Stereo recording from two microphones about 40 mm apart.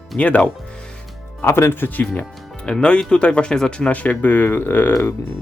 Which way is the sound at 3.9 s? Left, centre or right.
Left.